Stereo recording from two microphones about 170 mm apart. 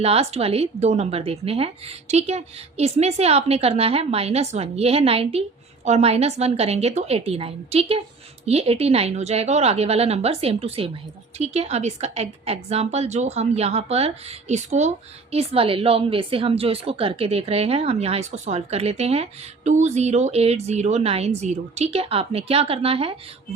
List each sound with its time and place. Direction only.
0.0 s a woman's voice: 35° right (ahead or behind)